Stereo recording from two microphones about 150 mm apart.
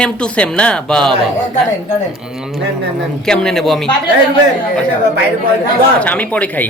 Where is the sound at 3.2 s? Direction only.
5° left (ahead or behind).